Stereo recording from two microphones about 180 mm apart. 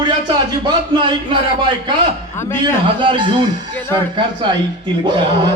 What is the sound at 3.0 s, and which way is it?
Speech, 25° right (ahead or behind).